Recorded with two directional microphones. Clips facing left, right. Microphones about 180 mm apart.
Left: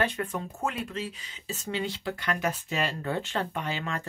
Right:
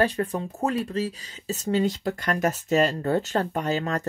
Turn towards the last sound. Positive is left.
turn(degrees=-40)  # may be behind; listen again after turning